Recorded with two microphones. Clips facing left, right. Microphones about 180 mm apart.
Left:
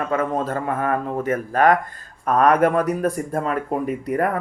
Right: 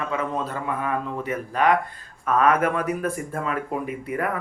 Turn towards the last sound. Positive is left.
turn(degrees=40)  # may be behind; listen again after turning